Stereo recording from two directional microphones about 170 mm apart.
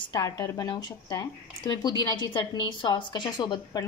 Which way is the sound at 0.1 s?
20° left (ahead or behind).